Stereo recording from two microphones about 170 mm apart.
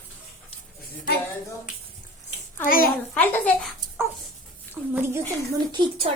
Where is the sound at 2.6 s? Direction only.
55° left (ahead or behind).